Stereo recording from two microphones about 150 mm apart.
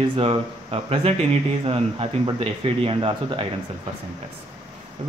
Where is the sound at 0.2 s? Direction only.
40° right (ahead or behind).